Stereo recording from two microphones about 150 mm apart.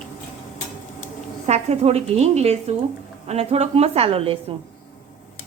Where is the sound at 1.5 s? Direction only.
45° right (ahead or behind).